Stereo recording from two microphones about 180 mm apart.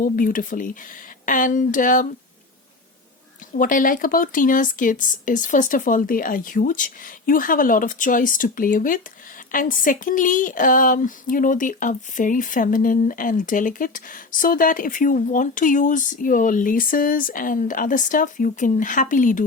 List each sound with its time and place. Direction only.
0.0 s speech: 50° left (ahead or behind)
3.5 s speech: 50° left (ahead or behind)